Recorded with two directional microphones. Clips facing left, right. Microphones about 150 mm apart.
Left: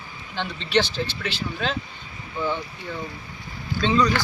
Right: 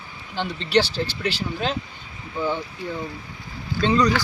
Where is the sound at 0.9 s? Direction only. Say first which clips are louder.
Right 3 dB; 35° right (ahead or behind).